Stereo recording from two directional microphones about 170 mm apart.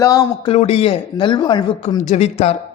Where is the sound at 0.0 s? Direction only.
20° left (ahead or behind).